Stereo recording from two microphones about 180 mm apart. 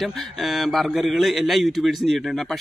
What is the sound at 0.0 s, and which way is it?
A man's voice, centre (ahead or behind).